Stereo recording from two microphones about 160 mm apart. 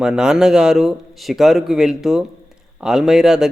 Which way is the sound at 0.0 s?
5° right (ahead or behind).